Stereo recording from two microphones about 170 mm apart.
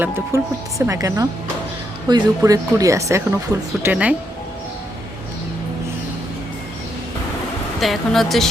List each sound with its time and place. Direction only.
0.0 s speech: 15° right (ahead or behind)
7.8 s speech: centre (ahead or behind)